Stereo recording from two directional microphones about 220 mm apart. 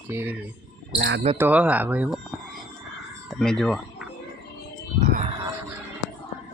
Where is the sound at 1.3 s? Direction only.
5° right (ahead or behind).